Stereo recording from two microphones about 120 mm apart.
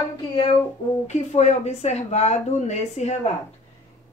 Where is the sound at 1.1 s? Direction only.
70° left (ahead or behind).